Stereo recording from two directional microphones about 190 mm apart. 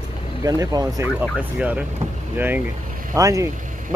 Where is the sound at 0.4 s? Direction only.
20° right (ahead or behind).